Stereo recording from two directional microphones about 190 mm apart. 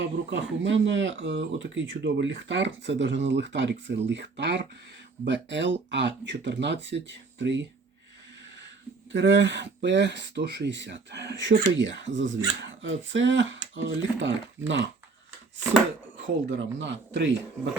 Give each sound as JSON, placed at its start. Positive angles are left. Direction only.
{"t": 0.0, "sound": "speech", "side_deg": -65}
{"t": 9.1, "sound": "speech", "side_deg": -70}
{"t": 16.5, "sound": "speech", "side_deg": -75}